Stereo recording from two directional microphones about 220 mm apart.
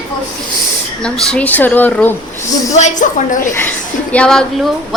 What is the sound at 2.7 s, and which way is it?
Speech, 35° left (ahead or behind).